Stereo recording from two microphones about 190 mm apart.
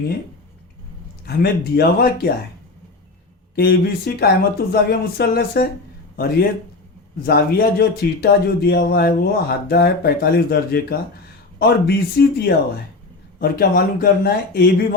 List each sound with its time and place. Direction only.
1.2 s speech: 55° left (ahead or behind)
3.5 s speech: 55° left (ahead or behind)
7.2 s speech: 55° left (ahead or behind)